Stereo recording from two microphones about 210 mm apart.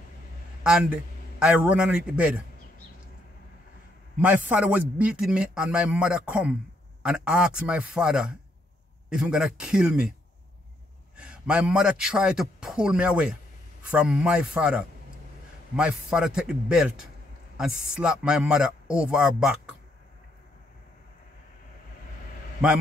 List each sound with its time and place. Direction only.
0.7 s a man's voice: 5° right (ahead or behind)
4.2 s a man's voice: 5° right (ahead or behind)
11.1 s a man's voice: 5° right (ahead or behind)